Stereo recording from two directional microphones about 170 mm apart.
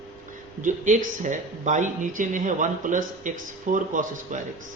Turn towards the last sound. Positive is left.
turn(degrees=-50)  # may be behind; listen again after turning